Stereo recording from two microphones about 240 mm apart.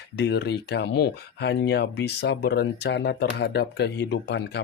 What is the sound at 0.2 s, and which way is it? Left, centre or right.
Speech, left.